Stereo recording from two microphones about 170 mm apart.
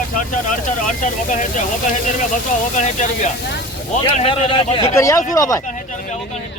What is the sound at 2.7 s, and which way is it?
Speech, 45° left (ahead or behind).